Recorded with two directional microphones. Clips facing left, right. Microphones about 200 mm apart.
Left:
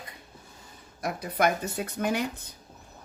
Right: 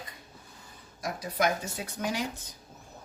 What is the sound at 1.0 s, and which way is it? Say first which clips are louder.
Speech: left 3 dB; 60° left (ahead or behind).